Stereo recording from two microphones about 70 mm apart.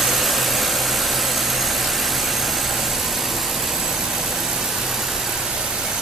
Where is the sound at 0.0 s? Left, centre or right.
Centre.